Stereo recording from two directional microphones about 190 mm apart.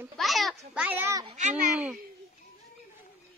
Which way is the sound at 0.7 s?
10° right (ahead or behind).